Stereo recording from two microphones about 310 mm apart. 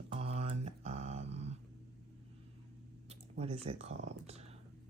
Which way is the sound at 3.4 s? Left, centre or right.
Centre.